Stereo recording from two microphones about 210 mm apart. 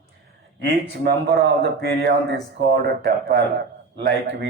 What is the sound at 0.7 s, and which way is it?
A man's voice, 50° right (ahead or behind).